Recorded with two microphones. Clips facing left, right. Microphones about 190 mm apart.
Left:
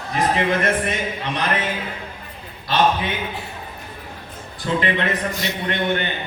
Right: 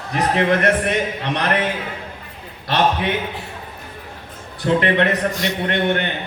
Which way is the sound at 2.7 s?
65° right (ahead or behind).